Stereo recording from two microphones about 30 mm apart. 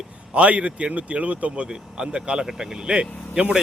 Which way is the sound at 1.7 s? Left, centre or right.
Right.